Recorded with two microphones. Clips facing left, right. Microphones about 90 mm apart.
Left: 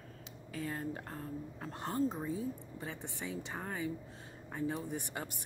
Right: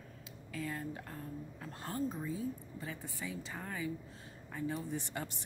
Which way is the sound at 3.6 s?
30° left (ahead or behind).